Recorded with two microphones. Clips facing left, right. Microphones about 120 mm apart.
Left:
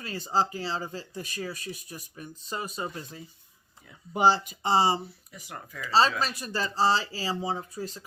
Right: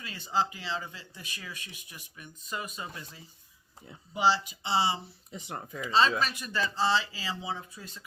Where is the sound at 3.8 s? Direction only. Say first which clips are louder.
Right 4 dB; 25° right (ahead or behind).